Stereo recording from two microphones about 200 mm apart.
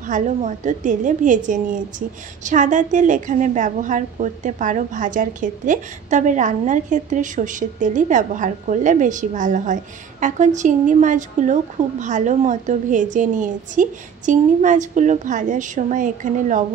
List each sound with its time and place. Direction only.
0.0 s a woman's voice: 40° right (ahead or behind)